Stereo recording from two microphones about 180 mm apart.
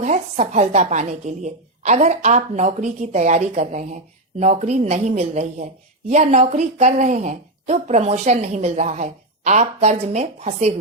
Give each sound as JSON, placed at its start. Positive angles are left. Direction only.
{"t": 0.0, "sound": "a woman's voice", "side_deg": -40}